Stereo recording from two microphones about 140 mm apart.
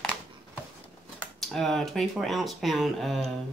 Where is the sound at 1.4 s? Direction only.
5° left (ahead or behind).